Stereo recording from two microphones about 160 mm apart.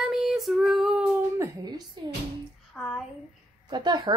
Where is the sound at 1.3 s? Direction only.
20° right (ahead or behind).